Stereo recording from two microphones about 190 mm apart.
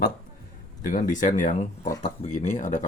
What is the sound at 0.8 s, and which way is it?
Speech, 45° left (ahead or behind).